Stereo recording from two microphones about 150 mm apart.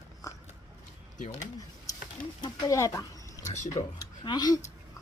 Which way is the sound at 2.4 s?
25° left (ahead or behind).